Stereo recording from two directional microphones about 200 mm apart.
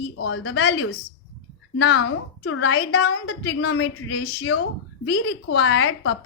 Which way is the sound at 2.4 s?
90° left.